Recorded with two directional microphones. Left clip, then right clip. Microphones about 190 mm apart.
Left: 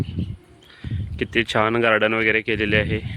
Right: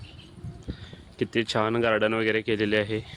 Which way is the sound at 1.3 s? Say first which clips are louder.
Left 6 dB; 15° left (ahead or behind).